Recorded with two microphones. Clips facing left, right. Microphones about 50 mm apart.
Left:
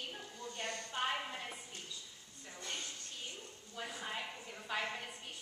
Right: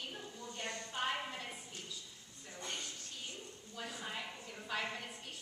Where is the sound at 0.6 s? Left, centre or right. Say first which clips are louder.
Left 1 dB; centre.